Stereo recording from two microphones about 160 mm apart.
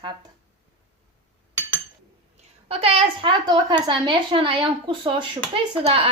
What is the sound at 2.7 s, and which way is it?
A woman's voice, 40° right (ahead or behind).